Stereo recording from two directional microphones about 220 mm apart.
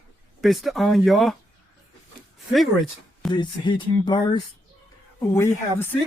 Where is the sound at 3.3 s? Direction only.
20° left (ahead or behind).